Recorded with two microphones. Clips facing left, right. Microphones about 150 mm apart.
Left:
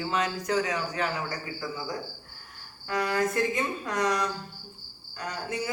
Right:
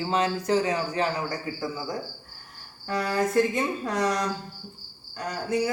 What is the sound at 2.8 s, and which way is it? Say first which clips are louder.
Speech: right 1 dB; 35° right (ahead or behind).